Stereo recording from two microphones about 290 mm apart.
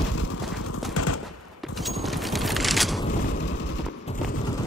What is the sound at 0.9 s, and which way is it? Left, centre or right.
Machine gun, left.